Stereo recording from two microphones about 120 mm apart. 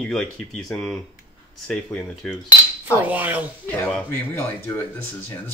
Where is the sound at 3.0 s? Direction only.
15° right (ahead or behind).